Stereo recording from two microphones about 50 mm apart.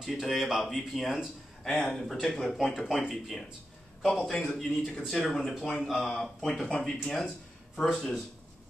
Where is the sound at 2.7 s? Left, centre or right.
Centre.